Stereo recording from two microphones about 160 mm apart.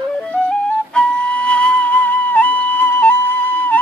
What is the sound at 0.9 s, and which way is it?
Flute, 5° left (ahead or behind).